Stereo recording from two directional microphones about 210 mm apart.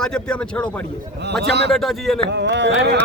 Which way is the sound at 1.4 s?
55° right (ahead or behind).